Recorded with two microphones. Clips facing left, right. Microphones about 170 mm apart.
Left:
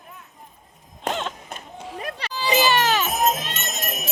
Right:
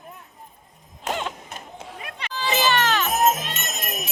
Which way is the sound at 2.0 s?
35° left (ahead or behind).